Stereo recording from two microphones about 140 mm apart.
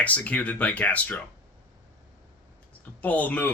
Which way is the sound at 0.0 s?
10° left (ahead or behind).